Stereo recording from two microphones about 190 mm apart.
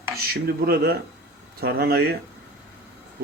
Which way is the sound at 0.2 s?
55° right (ahead or behind).